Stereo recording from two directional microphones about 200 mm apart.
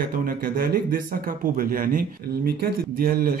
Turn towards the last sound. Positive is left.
turn(degrees=-50)  # may be behind; listen again after turning